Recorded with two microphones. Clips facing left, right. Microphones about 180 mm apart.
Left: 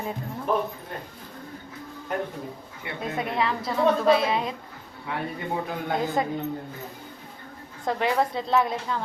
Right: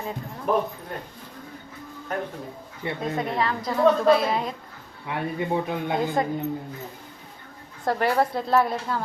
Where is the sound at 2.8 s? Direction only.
25° right (ahead or behind).